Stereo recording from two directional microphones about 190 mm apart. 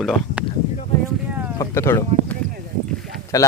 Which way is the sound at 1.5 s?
15° left (ahead or behind).